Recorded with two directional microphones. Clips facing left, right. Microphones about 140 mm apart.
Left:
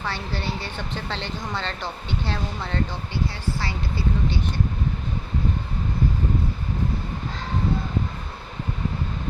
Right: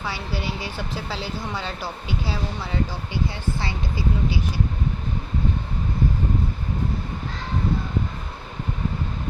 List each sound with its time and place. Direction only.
0.0 s speech: 10° right (ahead or behind)
3.2 s speech: 20° right (ahead or behind)